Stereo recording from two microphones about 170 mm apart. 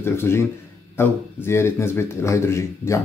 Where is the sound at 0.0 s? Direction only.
15° left (ahead or behind).